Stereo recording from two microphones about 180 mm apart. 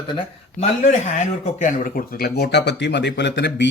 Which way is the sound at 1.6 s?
50° left (ahead or behind).